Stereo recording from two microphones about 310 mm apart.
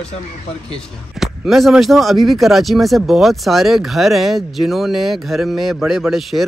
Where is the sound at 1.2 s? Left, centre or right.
Centre.